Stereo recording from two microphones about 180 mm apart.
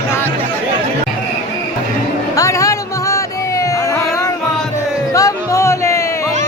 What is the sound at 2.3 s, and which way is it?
Music, 20° left (ahead or behind).